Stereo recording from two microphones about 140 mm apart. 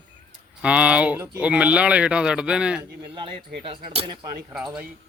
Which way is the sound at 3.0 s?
35° right (ahead or behind).